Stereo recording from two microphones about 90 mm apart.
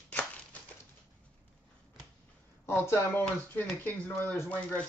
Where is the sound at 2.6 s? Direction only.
25° left (ahead or behind).